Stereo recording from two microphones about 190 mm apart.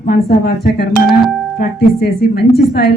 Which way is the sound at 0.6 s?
55° left (ahead or behind).